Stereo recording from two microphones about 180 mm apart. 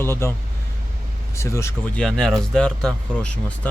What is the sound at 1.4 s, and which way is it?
Speech, 15° left (ahead or behind).